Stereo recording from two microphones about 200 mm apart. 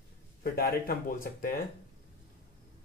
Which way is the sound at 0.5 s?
45° left (ahead or behind).